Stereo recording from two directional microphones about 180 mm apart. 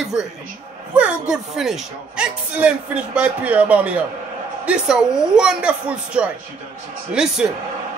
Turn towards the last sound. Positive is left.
turn(degrees=-5)  # may be behind; listen again after turning